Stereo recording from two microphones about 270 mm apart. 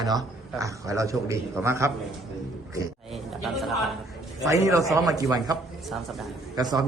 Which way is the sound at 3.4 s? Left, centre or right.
Centre.